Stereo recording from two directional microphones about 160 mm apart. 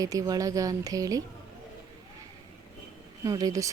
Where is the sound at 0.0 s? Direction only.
20° right (ahead or behind).